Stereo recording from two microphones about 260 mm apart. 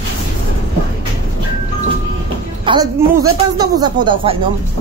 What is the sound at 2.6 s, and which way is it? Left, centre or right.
A woman's voice, centre.